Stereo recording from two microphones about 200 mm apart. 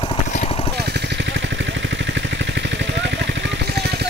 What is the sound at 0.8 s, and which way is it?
Vehicle, 55° right (ahead or behind).